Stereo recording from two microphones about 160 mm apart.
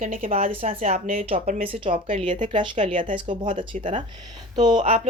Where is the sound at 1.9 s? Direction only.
50° right (ahead or behind).